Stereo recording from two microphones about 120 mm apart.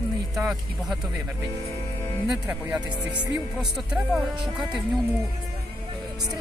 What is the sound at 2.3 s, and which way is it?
Speech, 10° right (ahead or behind).